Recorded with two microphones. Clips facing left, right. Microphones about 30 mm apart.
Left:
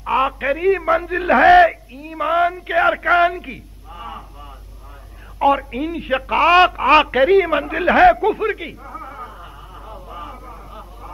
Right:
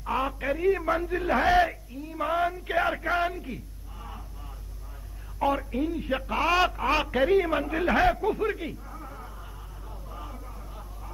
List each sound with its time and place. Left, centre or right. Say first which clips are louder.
0.0 s a man's voice: left 10 dB; left
5.4 s speech: left 9 dB; left
6.9 s a sound: left 10 dB; left